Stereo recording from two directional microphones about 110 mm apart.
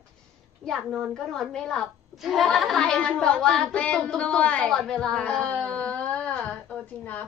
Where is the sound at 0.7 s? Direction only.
Centre (ahead or behind).